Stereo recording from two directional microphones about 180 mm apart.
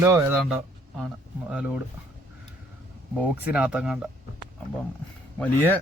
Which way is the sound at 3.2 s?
5° right (ahead or behind).